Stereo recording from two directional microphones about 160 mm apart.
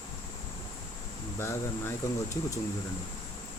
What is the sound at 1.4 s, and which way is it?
Speech, 15° left (ahead or behind).